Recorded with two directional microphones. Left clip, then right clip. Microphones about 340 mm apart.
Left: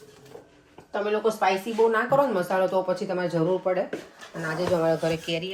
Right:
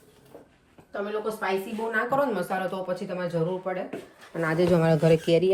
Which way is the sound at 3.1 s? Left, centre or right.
Centre.